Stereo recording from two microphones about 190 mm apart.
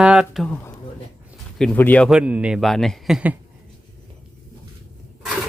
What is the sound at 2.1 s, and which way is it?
Speech, 5° right (ahead or behind).